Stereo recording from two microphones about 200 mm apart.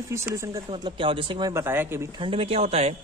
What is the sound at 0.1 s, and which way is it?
A man's voice, 15° right (ahead or behind).